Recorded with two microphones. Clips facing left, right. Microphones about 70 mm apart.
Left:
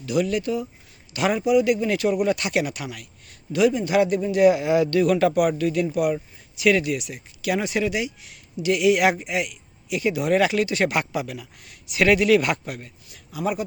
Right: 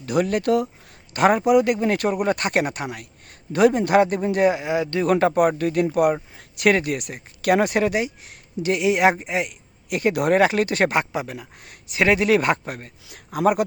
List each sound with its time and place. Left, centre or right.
0.0 s speech: right
4.4 s speech: right
5.0 s speech: right
6.3 s a sound: right
6.7 s speech: right
9.9 s speech: right
10.9 s speech: right
11.9 s speech: right
13.1 s speech: right